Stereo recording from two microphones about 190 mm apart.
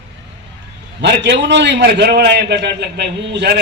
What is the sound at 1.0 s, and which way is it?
A man's voice, 65° right (ahead or behind).